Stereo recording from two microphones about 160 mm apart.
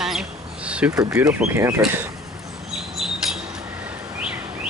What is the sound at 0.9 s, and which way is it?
Speech, 20° right (ahead or behind).